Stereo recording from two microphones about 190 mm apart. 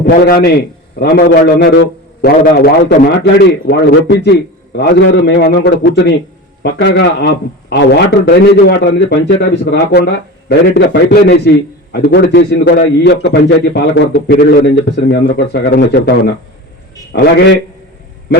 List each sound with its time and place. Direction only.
0.0 s a man's voice: 50° left (ahead or behind)